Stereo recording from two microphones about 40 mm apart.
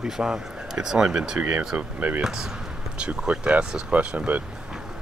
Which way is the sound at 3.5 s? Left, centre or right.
Right.